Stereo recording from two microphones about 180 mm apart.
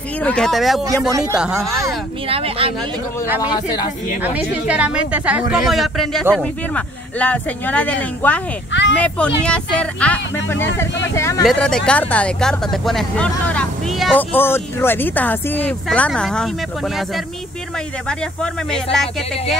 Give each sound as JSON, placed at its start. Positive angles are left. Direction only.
{"t": 0.2, "sound": "speech", "side_deg": 5}
{"t": 2.2, "sound": "speech", "side_deg": -30}
{"t": 3.5, "sound": "speech", "side_deg": 25}
{"t": 4.2, "sound": "a woman's voice", "side_deg": -10}
{"t": 11.4, "sound": "speech", "side_deg": 5}
{"t": 14.1, "sound": "speech", "side_deg": 10}